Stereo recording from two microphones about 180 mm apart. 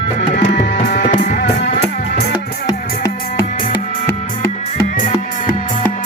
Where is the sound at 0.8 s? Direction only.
65° left (ahead or behind).